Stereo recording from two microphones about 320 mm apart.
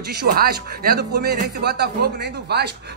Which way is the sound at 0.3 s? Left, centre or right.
Right.